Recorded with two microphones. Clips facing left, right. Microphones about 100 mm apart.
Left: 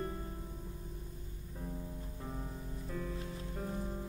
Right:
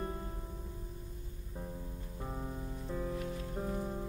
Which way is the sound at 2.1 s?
20° right (ahead or behind).